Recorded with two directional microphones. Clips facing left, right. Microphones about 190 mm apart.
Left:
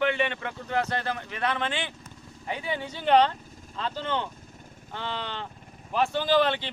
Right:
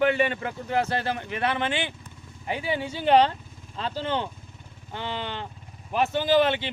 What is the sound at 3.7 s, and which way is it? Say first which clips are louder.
Speech: right 2 dB; 30° right (ahead or behind).